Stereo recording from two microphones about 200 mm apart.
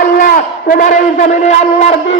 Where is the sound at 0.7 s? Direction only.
40° left (ahead or behind).